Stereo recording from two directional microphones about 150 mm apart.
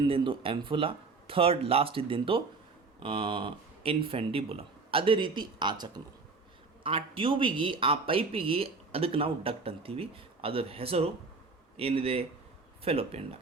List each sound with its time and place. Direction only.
0.1 s speech: 35° right (ahead or behind)